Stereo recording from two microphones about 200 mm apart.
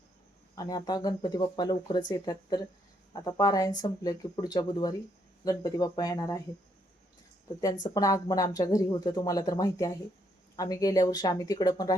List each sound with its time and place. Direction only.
0.5 s speech: 20° left (ahead or behind)
7.9 s speech: 20° left (ahead or behind)